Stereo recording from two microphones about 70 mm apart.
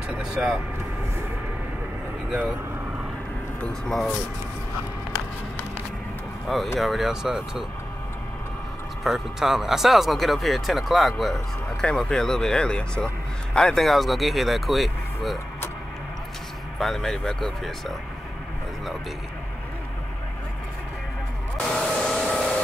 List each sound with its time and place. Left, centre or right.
0.2 s vehicle: centre
6.4 s speech: centre
9.0 s a man's voice: centre
16.7 s speech: centre
21.6 s a sound: centre